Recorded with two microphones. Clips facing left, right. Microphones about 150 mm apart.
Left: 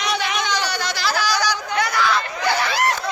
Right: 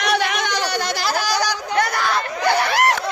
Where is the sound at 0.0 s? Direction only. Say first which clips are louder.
Right 3 dB; 60° right (ahead or behind); by 1.8 s 35° right (ahead or behind).